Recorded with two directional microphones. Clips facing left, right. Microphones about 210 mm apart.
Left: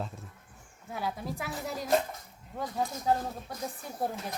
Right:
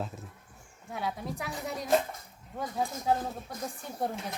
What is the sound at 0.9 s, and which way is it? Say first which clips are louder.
Speech: even; centre (ahead or behind).